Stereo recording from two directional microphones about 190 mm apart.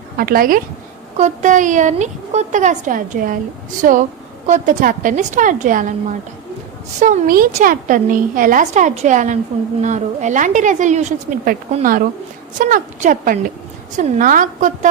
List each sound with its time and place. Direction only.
0.2 s a woman's voice: 50° right (ahead or behind)